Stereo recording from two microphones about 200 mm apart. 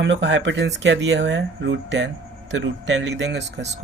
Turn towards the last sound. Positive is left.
turn(degrees=-60)  # may be behind; listen again after turning